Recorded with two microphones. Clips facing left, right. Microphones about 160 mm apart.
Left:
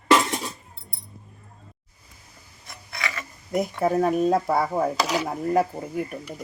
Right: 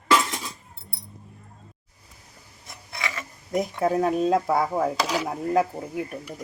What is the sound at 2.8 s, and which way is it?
Filing, 20° right (ahead or behind).